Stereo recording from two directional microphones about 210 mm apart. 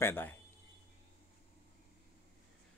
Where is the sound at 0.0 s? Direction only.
10° left (ahead or behind).